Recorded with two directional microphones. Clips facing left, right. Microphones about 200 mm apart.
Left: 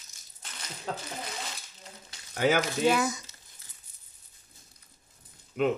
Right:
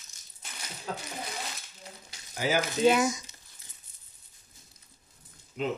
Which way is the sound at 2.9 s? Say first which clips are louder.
Right 4 dB; 20° right (ahead or behind).